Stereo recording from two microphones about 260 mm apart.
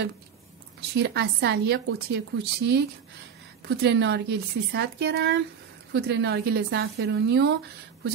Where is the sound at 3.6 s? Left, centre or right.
Right.